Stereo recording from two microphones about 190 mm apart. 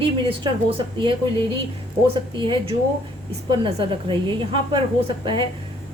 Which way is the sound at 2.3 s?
25° right (ahead or behind).